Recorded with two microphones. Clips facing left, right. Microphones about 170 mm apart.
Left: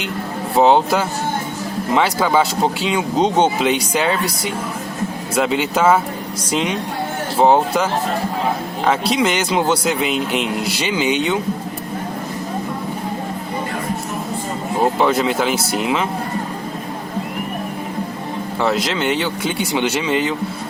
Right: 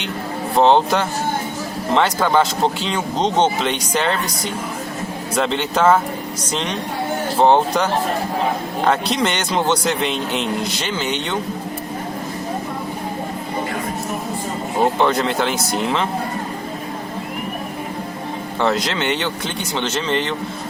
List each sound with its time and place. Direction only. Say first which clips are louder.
0.5 s speech: left 1 dB; 5° left (ahead or behind)
5.3 s speech: left 2 dB; 5° left (ahead or behind)
14.9 s speech: left 1 dB; 5° left (ahead or behind)
18.6 s speech: left 1 dB; centre (ahead or behind)